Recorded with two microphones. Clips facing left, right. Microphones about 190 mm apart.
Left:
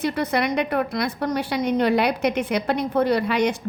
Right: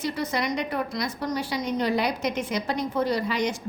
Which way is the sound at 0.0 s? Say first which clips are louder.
Left 5 dB; 60° left (ahead or behind).